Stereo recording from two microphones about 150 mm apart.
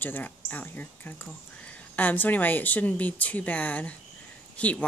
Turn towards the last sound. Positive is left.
turn(degrees=10)  # may be behind; listen again after turning